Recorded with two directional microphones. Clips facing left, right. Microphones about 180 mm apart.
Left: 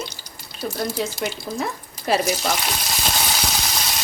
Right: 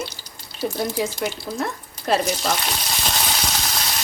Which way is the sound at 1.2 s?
Centre (ahead or behind).